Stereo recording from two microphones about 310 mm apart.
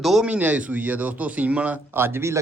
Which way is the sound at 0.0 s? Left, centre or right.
Centre.